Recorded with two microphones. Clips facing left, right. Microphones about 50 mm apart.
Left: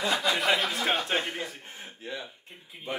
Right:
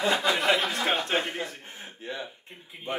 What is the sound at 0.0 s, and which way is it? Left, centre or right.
Speech, right.